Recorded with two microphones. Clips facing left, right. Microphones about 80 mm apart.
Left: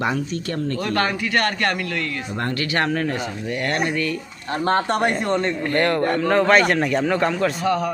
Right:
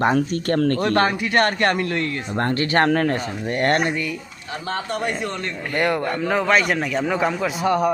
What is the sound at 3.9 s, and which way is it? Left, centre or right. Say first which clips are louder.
Speech: left 3 dB; centre.